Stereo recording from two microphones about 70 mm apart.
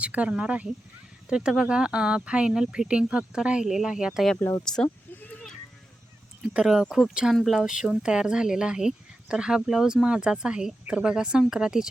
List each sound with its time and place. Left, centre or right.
0.0 s speech: centre
4.6 s speech: centre
6.5 s speech: centre
7.3 s speech: centre
7.6 s speech: centre